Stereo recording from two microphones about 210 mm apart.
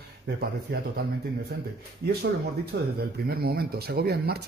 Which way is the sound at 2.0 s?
50° right (ahead or behind).